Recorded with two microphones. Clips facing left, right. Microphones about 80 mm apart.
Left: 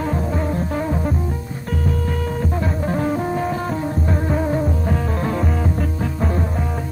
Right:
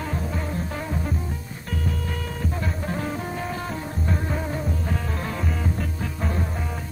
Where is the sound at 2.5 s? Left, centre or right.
Left.